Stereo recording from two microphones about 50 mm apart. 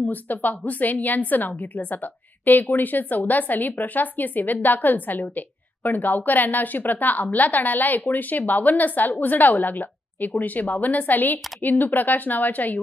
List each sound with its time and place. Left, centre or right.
0.0 s a woman's voice: left